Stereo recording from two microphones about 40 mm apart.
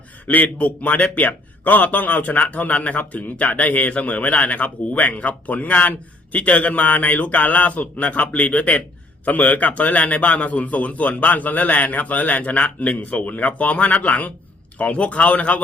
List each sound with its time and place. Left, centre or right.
0.3 s speech: left